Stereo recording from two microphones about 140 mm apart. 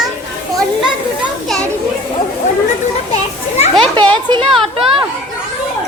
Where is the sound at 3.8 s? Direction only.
35° right (ahead or behind).